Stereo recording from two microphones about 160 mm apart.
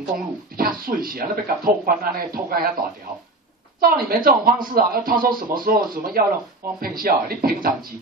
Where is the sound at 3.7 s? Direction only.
70° right (ahead or behind).